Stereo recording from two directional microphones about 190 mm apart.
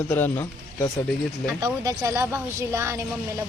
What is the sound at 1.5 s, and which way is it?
A woman's voice, 20° right (ahead or behind).